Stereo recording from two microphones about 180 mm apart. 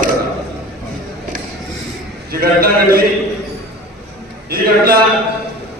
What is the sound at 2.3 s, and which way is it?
Speech, 55° right (ahead or behind).